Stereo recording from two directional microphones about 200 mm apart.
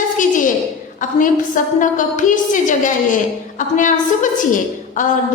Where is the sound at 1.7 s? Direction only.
40° left (ahead or behind).